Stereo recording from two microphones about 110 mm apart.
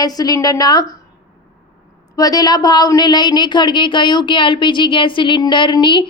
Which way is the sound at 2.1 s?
35° left (ahead or behind).